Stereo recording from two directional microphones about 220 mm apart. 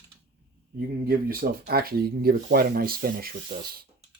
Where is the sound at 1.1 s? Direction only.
40° right (ahead or behind).